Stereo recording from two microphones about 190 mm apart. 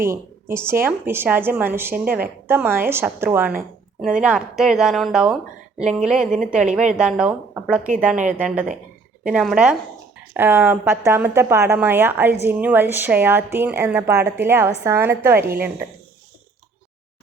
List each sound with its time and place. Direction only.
0.5 s speech: 10° right (ahead or behind)
8.1 s speech: 40° right (ahead or behind)
8.4 s speech: 5° right (ahead or behind)